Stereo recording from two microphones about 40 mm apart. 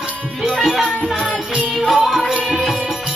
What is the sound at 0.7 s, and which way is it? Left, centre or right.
Music, centre.